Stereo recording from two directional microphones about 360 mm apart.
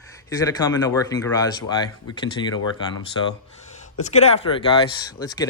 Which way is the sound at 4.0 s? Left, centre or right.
Centre.